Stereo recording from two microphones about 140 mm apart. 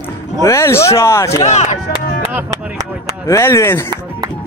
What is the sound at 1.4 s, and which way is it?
Speech, 50° left (ahead or behind).